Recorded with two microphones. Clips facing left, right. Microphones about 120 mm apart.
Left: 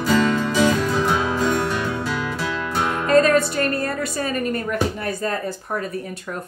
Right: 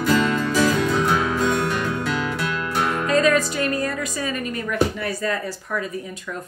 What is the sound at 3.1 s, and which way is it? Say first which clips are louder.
Music: left 4 dB; 50° left (ahead or behind).